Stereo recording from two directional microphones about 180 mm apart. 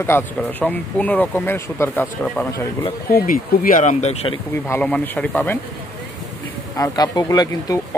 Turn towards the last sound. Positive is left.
turn(degrees=20)  # may be behind; listen again after turning